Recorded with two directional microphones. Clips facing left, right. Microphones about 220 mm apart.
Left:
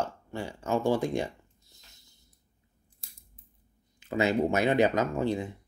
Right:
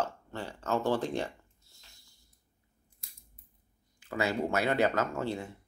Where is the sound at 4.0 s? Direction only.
20° left (ahead or behind).